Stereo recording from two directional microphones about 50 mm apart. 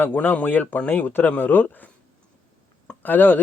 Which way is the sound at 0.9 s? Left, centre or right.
Left.